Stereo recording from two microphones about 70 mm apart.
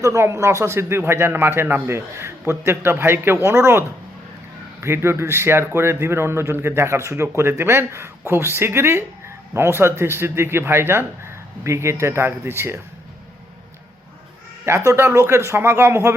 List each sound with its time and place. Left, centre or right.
0.0 s a man's voice: right
14.6 s a man's voice: right